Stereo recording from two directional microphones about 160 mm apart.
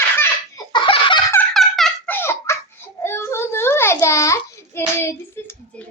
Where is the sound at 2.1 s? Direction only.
15° left (ahead or behind).